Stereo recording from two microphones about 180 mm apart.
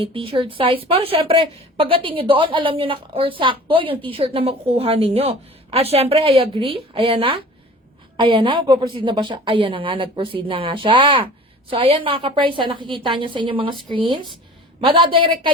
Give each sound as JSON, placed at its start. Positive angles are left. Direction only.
{"t": 0.0, "sound": "a woman's voice", "side_deg": -30}